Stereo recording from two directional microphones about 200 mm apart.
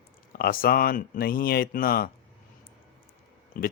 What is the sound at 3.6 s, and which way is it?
Speech, 45° left (ahead or behind).